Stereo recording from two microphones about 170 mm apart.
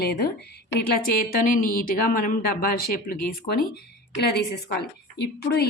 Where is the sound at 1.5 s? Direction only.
55° left (ahead or behind).